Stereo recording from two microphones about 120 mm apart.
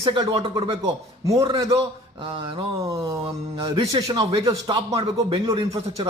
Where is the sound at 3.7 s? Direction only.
45° right (ahead or behind).